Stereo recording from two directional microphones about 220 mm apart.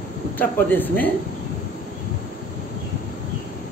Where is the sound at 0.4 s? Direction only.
10° left (ahead or behind).